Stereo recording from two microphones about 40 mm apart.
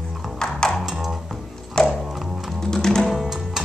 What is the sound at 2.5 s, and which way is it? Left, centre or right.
Music, centre.